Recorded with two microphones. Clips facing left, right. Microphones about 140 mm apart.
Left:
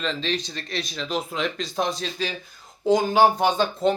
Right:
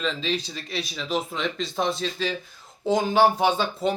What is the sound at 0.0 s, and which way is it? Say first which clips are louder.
Speech: even; centre (ahead or behind).